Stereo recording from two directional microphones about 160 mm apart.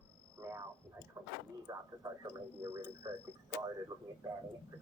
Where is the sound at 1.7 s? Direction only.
20° right (ahead or behind).